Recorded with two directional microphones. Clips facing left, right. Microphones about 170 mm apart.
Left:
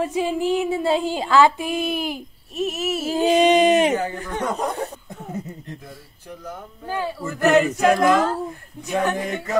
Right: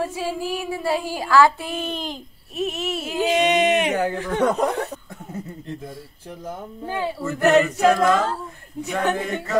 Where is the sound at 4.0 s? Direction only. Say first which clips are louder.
Right 5 dB; 80° right.